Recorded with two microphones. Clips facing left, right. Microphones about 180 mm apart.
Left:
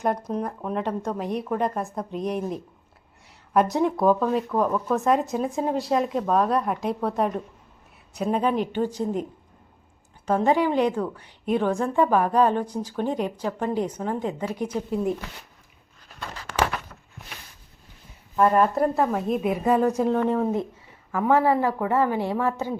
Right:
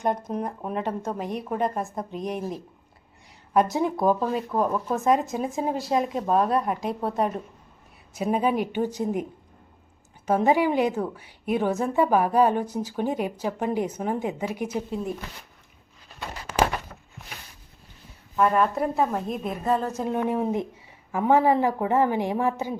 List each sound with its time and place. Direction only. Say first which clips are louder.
0.0 s a woman's voice: left 1 dB; centre (ahead or behind)
10.2 s a woman's voice: even; 10° right (ahead or behind)
16.2 s a sound: right 2 dB; 20° right (ahead or behind)
18.5 s speech: left 3 dB; centre (ahead or behind)
20.1 s a woman's voice: left 3 dB; 10° right (ahead or behind)